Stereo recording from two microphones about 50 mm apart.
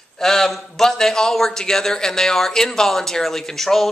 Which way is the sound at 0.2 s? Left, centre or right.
Centre.